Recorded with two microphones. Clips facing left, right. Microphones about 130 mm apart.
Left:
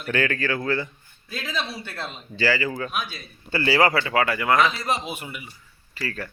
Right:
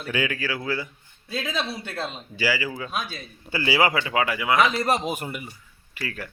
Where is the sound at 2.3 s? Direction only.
10° right (ahead or behind).